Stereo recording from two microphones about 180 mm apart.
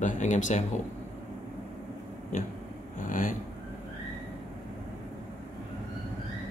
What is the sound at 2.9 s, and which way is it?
Vehicle, 45° left (ahead or behind).